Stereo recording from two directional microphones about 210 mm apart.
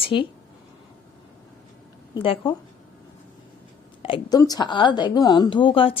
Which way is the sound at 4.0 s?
25° left (ahead or behind).